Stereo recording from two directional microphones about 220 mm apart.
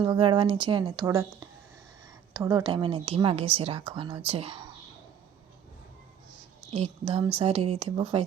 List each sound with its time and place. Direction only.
0.0 s speech: 20° right (ahead or behind)
2.3 s speech: 15° right (ahead or behind)
6.7 s speech: 25° right (ahead or behind)